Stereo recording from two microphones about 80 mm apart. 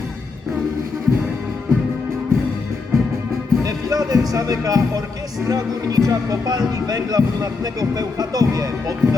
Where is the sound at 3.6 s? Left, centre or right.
Right.